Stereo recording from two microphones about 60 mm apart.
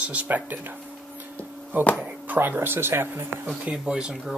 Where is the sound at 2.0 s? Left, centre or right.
Right.